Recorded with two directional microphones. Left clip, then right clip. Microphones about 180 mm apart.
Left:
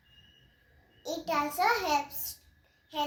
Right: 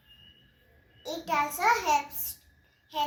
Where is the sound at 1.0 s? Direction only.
15° left (ahead or behind).